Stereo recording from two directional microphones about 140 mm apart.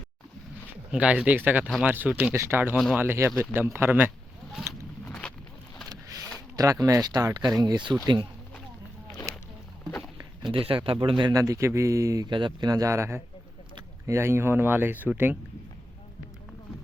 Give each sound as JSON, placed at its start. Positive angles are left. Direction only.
{"t": 0.7, "sound": "speech", "side_deg": -10}
{"t": 5.0, "sound": "a sound", "side_deg": 10}
{"t": 5.9, "sound": "vehicle", "side_deg": -25}
{"t": 6.6, "sound": "a man's voice", "side_deg": -25}
{"t": 10.5, "sound": "speech", "side_deg": -40}
{"t": 11.3, "sound": "a man's voice", "side_deg": -25}